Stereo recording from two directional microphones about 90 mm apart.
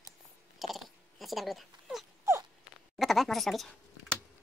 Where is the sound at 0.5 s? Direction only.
Centre (ahead or behind).